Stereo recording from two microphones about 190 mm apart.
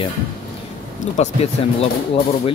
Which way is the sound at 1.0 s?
40° left (ahead or behind).